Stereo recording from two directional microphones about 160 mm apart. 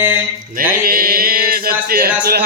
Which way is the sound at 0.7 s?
65° right (ahead or behind).